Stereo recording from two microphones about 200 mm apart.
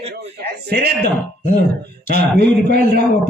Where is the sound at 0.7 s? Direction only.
55° right (ahead or behind).